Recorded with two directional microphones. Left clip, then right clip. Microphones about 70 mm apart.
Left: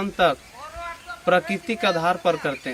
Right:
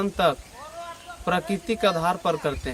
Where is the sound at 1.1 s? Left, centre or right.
Centre.